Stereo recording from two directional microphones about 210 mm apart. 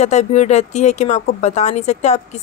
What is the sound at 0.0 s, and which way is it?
Speech, 35° left (ahead or behind).